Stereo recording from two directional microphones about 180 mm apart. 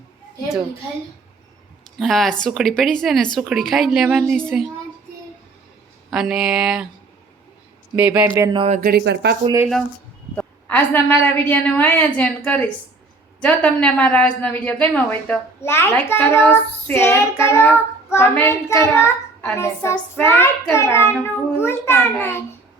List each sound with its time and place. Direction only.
2.0 s a woman's voice: centre (ahead or behind)
6.1 s a woman's voice: centre (ahead or behind)
7.9 s speech: 10° right (ahead or behind)
8.5 s speech: 35° right (ahead or behind)
8.8 s speech: 60° right (ahead or behind)
10.3 s child singing: 10° left (ahead or behind)